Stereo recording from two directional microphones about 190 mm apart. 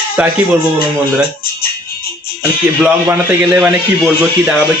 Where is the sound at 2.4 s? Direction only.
10° right (ahead or behind).